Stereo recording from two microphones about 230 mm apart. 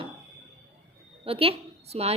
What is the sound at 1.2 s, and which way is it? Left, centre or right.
Speech, right.